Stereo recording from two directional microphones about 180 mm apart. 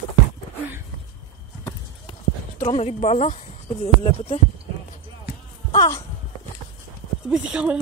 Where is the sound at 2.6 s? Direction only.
35° left (ahead or behind).